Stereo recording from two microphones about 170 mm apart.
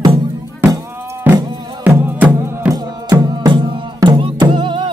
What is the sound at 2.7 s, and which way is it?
Music, 20° right (ahead or behind).